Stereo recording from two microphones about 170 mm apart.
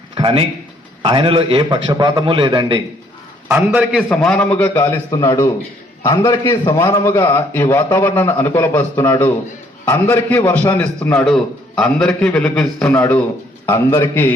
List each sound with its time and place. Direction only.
0.1 s a sound: 30° right (ahead or behind)
1.0 s a man's voice: 30° right (ahead or behind)
3.5 s a man's voice: 10° right (ahead or behind)
4.1 s a man's voice: 5° left (ahead or behind)
13.7 s a man's voice: 15° left (ahead or behind)